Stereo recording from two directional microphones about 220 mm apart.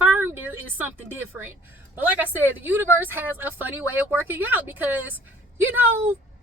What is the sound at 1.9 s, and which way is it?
Speech, 10° right (ahead or behind).